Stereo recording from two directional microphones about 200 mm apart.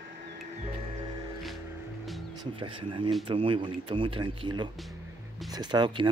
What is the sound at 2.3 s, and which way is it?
Speech, 25° right (ahead or behind).